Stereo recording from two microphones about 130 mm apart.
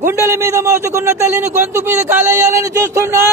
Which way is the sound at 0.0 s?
20° right (ahead or behind).